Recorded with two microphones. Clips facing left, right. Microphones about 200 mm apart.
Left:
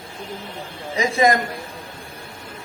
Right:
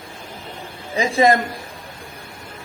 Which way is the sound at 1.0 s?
30° right (ahead or behind).